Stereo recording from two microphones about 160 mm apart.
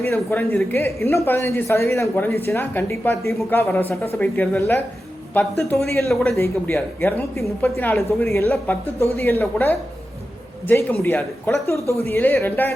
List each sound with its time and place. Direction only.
0.0 s speech: 15° left (ahead or behind)
6.1 s a man's voice: centre (ahead or behind)
6.3 s speech: 15° left (ahead or behind)